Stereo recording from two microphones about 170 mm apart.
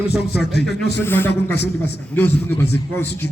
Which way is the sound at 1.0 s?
10° left (ahead or behind).